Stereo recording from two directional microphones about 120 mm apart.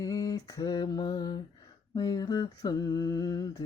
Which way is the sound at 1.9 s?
35° left (ahead or behind).